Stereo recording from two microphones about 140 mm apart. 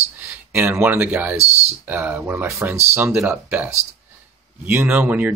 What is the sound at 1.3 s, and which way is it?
Speech, 50° right (ahead or behind).